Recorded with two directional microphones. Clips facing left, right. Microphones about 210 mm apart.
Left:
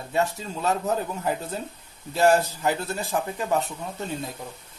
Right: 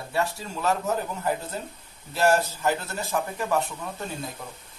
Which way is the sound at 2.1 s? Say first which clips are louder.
Left 2 dB; 15° left (ahead or behind).